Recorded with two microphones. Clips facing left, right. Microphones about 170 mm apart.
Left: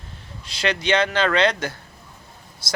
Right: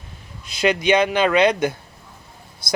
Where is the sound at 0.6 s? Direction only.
15° right (ahead or behind).